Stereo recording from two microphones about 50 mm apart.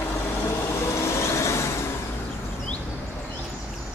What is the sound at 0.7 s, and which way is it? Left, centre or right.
Vehicle, left.